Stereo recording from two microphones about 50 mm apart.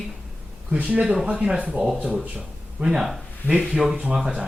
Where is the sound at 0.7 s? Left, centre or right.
Right.